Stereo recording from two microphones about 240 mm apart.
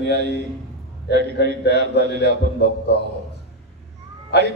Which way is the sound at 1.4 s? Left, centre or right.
Left.